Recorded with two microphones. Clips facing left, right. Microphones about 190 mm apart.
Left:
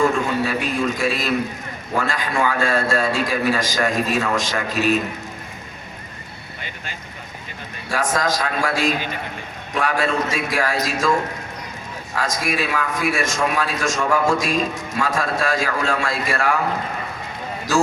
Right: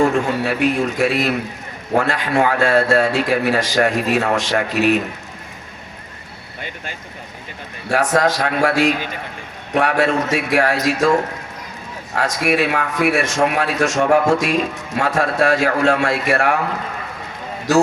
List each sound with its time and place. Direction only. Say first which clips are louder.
0.4 s a man's voice: right 4 dB; 65° right (ahead or behind)
7.9 s a man's voice: right 5 dB; 65° right (ahead or behind)
12.1 s a man's voice: right 5 dB; 65° right (ahead or behind)